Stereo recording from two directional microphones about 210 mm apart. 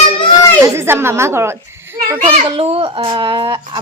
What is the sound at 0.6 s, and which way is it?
Speech, 10° right (ahead or behind).